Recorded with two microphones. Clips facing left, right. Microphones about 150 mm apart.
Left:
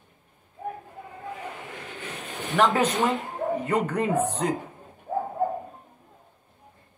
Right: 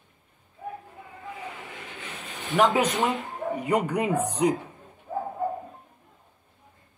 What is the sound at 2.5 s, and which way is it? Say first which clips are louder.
A woman's voice: even; 20° right (ahead or behind).